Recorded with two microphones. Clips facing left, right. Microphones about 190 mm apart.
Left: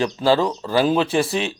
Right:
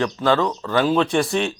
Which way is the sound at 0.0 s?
30° left (ahead or behind).